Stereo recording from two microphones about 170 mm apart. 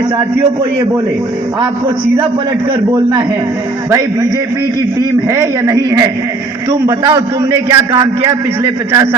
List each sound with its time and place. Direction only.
3.8 s a man's voice: 20° right (ahead or behind)
5.3 s a man's voice: 20° right (ahead or behind)